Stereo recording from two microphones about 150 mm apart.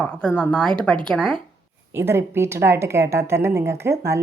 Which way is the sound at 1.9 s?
15° right (ahead or behind).